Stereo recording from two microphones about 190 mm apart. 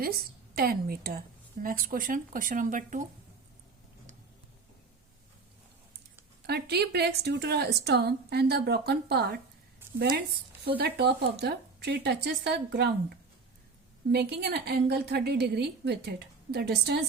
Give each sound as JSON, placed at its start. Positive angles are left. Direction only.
{"t": 0.0, "sound": "a woman's voice", "side_deg": -55}
{"t": 6.4, "sound": "a woman's voice", "side_deg": -60}
{"t": 10.7, "sound": "a woman's voice", "side_deg": -55}